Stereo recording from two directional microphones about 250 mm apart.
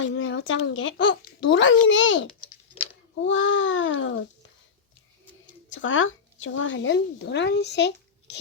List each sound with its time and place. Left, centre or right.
0.0 s a child's voice: left
5.7 s speech: left